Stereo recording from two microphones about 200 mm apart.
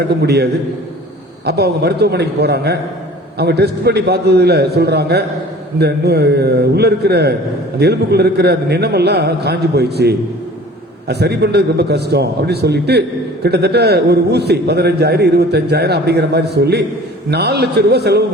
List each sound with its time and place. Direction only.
0.2 s a man's voice: 55° right (ahead or behind)